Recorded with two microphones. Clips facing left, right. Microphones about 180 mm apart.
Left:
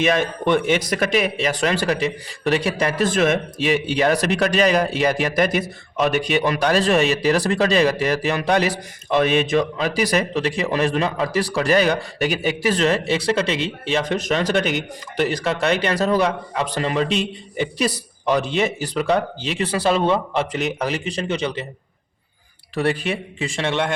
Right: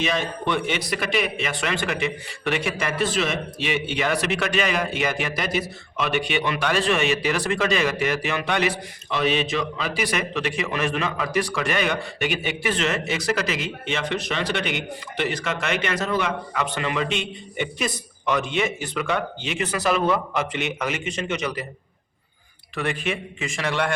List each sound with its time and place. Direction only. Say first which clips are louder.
0.0 s speech: left 6 dB; 50° left (ahead or behind); by 3.1 s 35° left (ahead or behind)
3.1 s speech: left 6 dB; 50° left (ahead or behind); by 21.7 s 25° left (ahead or behind)
22.7 s speech: left 5 dB; 35° left (ahead or behind)